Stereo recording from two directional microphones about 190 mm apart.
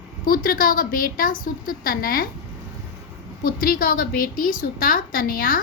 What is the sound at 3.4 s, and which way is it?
A woman's voice, 50° left (ahead or behind).